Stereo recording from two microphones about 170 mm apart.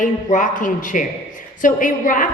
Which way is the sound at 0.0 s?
50° left (ahead or behind).